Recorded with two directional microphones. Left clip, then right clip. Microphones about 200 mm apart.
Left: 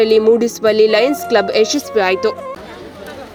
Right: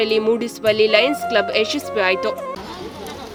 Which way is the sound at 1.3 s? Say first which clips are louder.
Left 5 dB; 15° left (ahead or behind).